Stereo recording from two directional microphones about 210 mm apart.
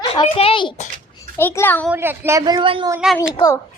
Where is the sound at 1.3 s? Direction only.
10° left (ahead or behind).